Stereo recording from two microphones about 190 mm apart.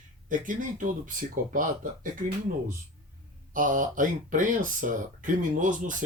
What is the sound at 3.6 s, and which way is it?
Speech, 45° right (ahead or behind).